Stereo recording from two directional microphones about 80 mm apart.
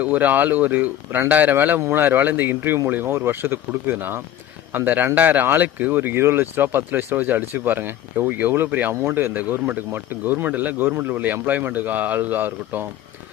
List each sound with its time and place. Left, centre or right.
0.0 s speech: right